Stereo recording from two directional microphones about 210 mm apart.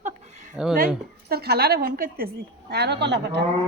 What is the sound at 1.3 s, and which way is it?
A woman's voice, 50° right (ahead or behind).